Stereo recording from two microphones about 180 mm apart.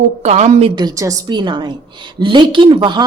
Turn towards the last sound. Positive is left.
turn(degrees=-25)  # may be behind; listen again after turning